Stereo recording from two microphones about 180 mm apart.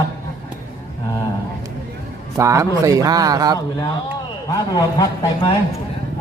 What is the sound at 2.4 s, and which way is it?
A man's voice, 15° right (ahead or behind).